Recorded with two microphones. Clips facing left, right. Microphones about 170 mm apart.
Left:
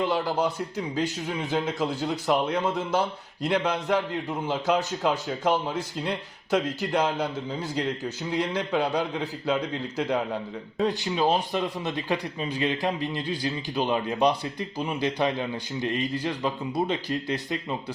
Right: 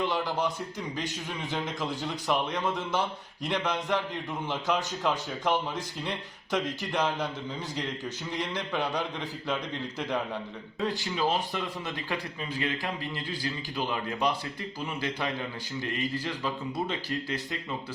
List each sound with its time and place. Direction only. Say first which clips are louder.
0.0 s a man's voice: left 4 dB; 10° left (ahead or behind)
1.5 s a man's voice: left 5 dB; 10° left (ahead or behind)